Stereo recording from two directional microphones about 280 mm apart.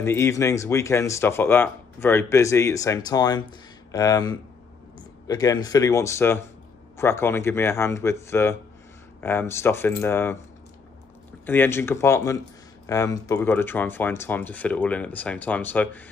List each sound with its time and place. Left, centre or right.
0.0 s speech: centre
11.4 s speech: centre